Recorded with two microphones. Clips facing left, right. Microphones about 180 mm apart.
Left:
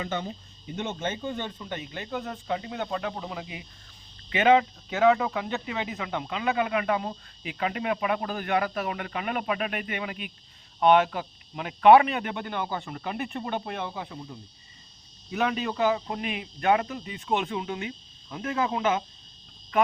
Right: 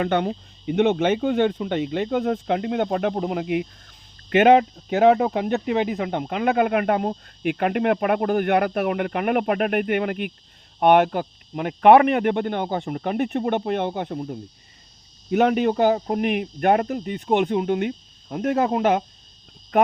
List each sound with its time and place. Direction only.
0.0 s speech: 70° right (ahead or behind)
15.7 s speech: 45° right (ahead or behind)